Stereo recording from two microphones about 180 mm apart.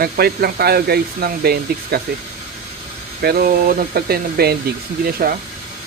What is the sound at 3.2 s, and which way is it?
Speech, 60° right (ahead or behind).